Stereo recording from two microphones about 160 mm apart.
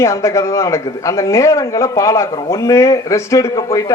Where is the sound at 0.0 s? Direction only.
20° left (ahead or behind).